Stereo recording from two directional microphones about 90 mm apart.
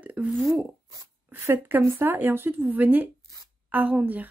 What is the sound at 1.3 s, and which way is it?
A woman's voice, 25° right (ahead or behind).